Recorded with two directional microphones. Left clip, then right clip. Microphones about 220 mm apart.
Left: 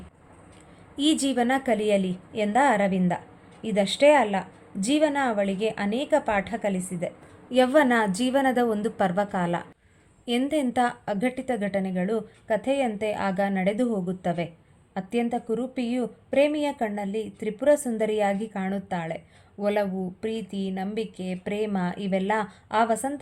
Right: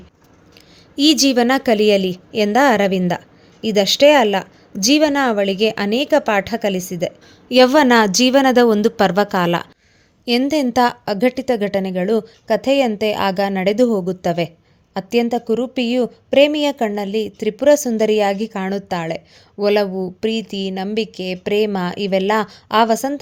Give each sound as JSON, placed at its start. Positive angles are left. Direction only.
{"t": 0.9, "sound": "a woman's voice", "side_deg": -40}